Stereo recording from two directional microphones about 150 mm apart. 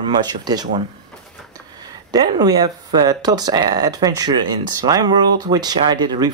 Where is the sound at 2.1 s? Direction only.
25° right (ahead or behind).